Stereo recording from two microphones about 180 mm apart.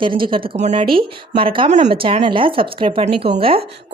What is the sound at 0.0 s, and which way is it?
Speech, 30° right (ahead or behind).